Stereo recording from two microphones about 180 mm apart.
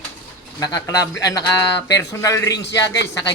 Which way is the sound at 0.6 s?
20° left (ahead or behind).